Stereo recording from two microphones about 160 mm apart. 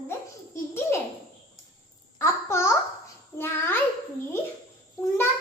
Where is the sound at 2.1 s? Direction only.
15° left (ahead or behind).